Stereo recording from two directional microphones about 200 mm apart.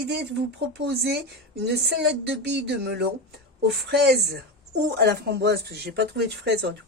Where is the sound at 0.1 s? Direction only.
60° right (ahead or behind).